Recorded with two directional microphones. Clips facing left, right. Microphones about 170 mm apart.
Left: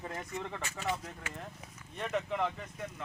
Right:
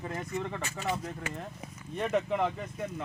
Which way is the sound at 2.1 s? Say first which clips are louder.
Right 4 dB; 15° right (ahead or behind).